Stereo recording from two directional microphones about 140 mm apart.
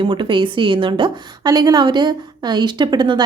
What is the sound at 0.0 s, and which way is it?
A woman's voice, 35° right (ahead or behind).